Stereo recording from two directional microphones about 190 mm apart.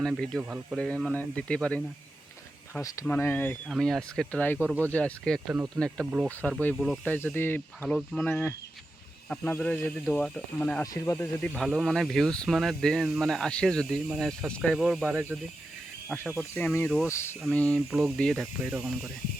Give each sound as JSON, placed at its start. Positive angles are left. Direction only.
{"t": 0.0, "sound": "speech", "side_deg": 0}
{"t": 2.8, "sound": "speech", "side_deg": 15}
{"t": 5.5, "sound": "speech", "side_deg": -10}
{"t": 7.0, "sound": "speech", "side_deg": 10}
{"t": 10.8, "sound": "speech", "side_deg": 20}
{"t": 11.3, "sound": "speech", "side_deg": 5}
{"t": 16.6, "sound": "speech", "side_deg": 10}